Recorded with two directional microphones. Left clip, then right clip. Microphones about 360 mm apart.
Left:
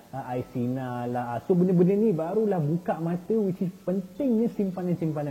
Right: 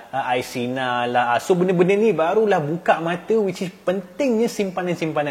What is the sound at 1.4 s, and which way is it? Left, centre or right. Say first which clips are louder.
Speech: right 6 dB; right.